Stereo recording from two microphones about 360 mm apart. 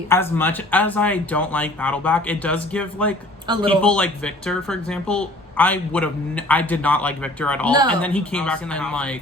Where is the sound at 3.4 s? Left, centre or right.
Centre.